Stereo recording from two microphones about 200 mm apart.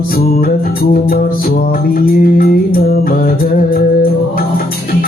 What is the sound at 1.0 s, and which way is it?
Music, 50° left (ahead or behind).